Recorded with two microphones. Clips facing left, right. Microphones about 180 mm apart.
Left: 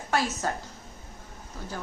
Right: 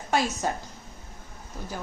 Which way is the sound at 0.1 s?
15° right (ahead or behind).